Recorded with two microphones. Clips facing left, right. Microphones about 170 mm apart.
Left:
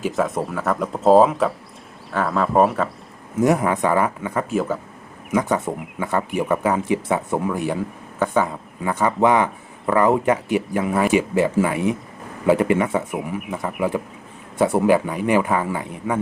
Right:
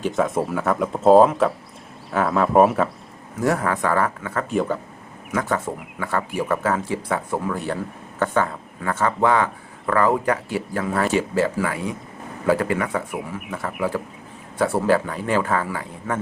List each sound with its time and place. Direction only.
0.0 s speech: centre (ahead or behind)
3.4 s speech: 15° left (ahead or behind)
4.5 s speech: centre (ahead or behind)
5.3 s speech: 15° left (ahead or behind)
14.6 s speech: 20° left (ahead or behind)